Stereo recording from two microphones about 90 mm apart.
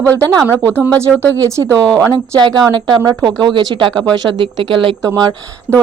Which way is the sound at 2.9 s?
55° right (ahead or behind).